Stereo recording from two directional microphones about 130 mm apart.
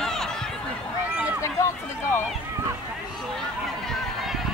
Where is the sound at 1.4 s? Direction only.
20° left (ahead or behind).